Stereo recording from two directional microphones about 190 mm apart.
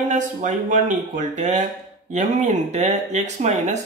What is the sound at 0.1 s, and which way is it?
Speech, 40° right (ahead or behind).